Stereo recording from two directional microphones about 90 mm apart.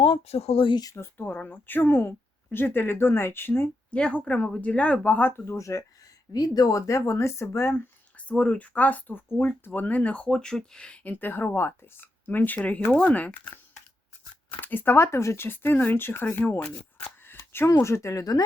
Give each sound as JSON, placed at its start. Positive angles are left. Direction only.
{"t": 0.0, "sound": "speech", "side_deg": 90}
{"t": 0.9, "sound": "speech", "side_deg": 20}
{"t": 3.9, "sound": "speech", "side_deg": 15}
{"t": 5.5, "sound": "a woman's voice", "side_deg": 35}
{"t": 6.3, "sound": "a woman's voice", "side_deg": 45}
{"t": 8.3, "sound": "speech", "side_deg": 15}
{"t": 14.6, "sound": "speech", "side_deg": 20}